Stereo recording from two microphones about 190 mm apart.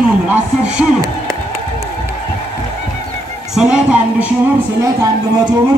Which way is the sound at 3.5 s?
5° right (ahead or behind).